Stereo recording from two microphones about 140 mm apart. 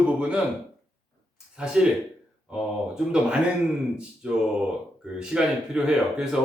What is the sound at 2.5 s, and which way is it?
A man's voice, 5° right (ahead or behind).